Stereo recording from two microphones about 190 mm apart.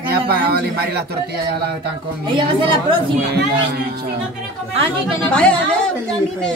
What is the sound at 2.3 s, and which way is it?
Speech, 25° right (ahead or behind).